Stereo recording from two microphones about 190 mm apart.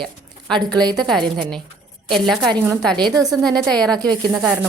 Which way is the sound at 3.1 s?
20° right (ahead or behind).